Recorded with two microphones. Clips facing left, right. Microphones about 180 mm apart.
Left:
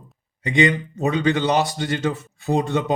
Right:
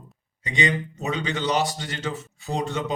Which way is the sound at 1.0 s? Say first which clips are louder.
Left 9 dB; 55° left (ahead or behind).